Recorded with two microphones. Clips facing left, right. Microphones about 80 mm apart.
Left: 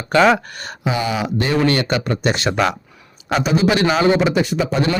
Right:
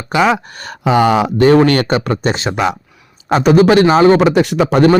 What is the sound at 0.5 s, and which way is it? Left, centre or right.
Speech, right.